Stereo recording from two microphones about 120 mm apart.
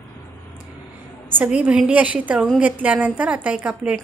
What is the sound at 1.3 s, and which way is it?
A woman's voice, 10° right (ahead or behind).